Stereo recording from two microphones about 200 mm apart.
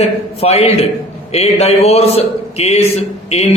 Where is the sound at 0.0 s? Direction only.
30° left (ahead or behind).